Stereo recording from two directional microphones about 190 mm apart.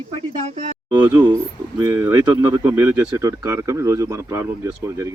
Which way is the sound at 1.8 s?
15° right (ahead or behind).